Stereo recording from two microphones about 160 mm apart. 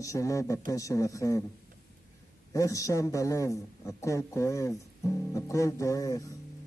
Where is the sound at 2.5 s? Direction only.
20° left (ahead or behind).